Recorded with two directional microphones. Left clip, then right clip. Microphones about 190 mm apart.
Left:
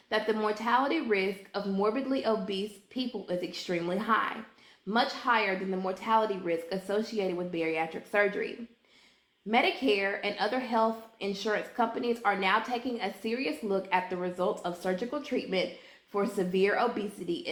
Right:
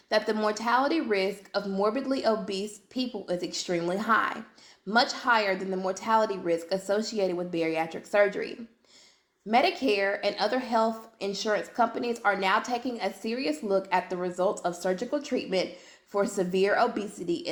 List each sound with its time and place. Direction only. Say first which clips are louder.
0.1 s a woman's voice: right 3 dB; 45° right (ahead or behind)
9.5 s a woman's voice: right 2 dB; 45° right (ahead or behind)